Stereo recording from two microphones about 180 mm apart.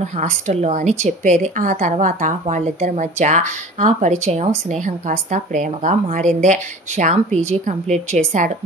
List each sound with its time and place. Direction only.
0.0 s a woman's voice: 40° right (ahead or behind)